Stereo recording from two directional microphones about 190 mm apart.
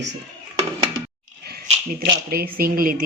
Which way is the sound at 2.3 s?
50° right (ahead or behind).